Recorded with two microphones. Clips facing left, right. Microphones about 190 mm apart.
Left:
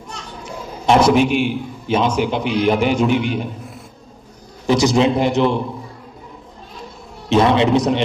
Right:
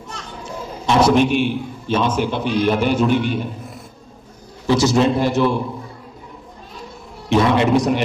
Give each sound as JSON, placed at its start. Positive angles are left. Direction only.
{"t": 0.8, "sound": "a man's voice", "side_deg": 10}
{"t": 4.6, "sound": "a man's voice", "side_deg": 15}
{"t": 7.2, "sound": "a man's voice", "side_deg": 20}